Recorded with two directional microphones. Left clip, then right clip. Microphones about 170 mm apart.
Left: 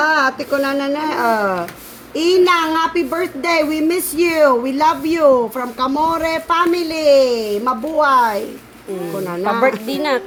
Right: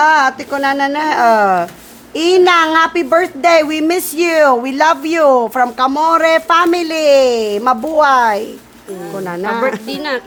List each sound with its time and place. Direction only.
0.0 s a woman's voice: 30° right (ahead or behind)
9.6 s speech: 5° right (ahead or behind)